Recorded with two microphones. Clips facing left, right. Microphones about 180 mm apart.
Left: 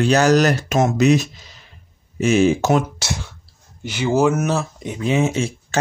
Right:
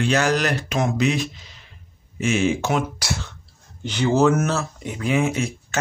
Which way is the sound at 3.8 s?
10° left (ahead or behind).